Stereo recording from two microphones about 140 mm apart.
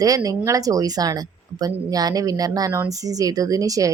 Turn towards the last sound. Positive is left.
turn(degrees=-25)  # may be behind; listen again after turning